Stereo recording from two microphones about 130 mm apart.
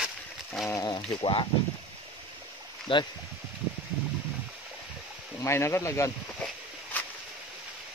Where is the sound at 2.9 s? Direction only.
40° left (ahead or behind).